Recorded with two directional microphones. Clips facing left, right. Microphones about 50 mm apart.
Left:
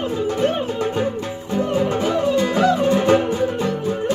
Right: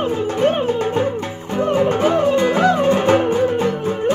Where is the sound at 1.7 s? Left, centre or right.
Right.